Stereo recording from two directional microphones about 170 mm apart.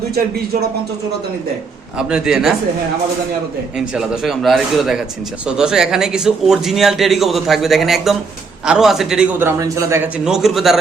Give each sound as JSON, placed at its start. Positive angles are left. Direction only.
{"t": 2.0, "sound": "a man's voice", "side_deg": -5}
{"t": 3.8, "sound": "a man's voice", "side_deg": -5}
{"t": 10.2, "sound": "a man's voice", "side_deg": 0}